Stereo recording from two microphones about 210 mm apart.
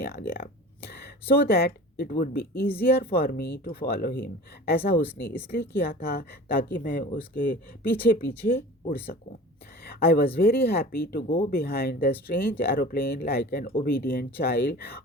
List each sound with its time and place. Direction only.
0.0 s speech: 45° left (ahead or behind)